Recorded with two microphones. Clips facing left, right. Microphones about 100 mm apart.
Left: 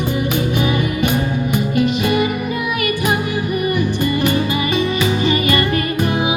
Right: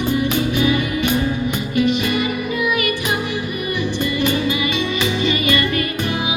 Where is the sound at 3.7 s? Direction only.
45° left (ahead or behind).